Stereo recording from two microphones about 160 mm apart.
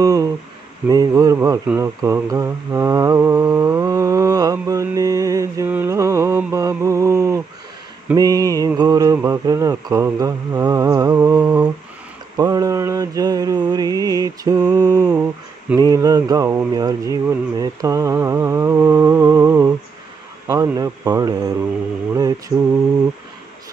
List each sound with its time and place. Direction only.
0.0 s a sound: 20° right (ahead or behind)
0.8 s speech: 25° right (ahead or behind)
1.7 s mantra: 15° right (ahead or behind)
8.1 s speech: 25° right (ahead or behind)
11.1 s a sound: 15° right (ahead or behind)
12.4 s speech: 20° right (ahead or behind)